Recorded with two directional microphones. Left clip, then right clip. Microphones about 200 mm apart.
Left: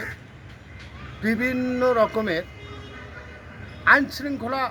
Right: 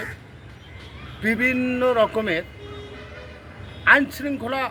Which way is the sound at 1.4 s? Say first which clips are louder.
Right 5 dB; 25° right (ahead or behind).